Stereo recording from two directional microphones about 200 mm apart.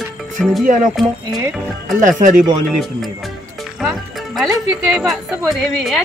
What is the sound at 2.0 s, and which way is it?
Speech, 40° right (ahead or behind).